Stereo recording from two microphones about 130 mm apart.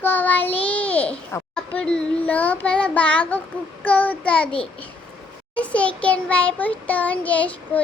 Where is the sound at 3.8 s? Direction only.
10° left (ahead or behind).